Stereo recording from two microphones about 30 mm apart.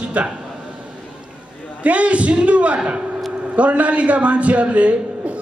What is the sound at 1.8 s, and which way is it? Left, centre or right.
A man's voice, right.